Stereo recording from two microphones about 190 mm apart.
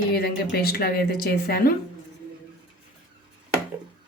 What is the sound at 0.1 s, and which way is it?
Speech, 55° left (ahead or behind).